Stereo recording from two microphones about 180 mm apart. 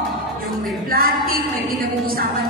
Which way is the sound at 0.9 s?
55° right (ahead or behind).